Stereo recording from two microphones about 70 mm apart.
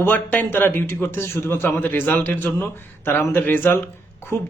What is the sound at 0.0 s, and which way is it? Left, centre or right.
A man's voice, left.